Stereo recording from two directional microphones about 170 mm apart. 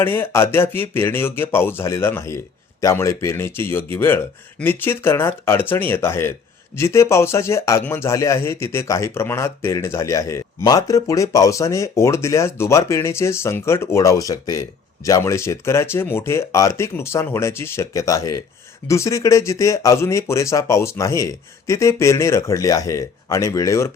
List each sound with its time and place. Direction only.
0.0 s a man's voice: 10° left (ahead or behind)